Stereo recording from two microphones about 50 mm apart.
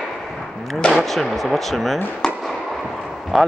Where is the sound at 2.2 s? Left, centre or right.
Centre.